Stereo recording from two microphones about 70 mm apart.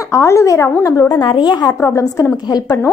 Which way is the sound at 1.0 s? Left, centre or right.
Left.